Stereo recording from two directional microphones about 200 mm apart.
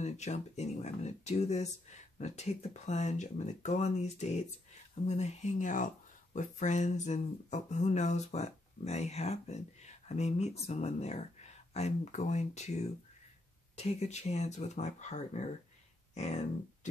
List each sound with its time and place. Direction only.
0.0 s speech: 35° left (ahead or behind)